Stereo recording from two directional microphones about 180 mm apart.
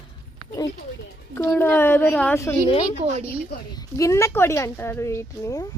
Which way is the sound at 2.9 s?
40° right (ahead or behind).